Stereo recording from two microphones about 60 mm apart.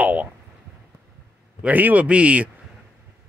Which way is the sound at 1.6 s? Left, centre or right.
Right.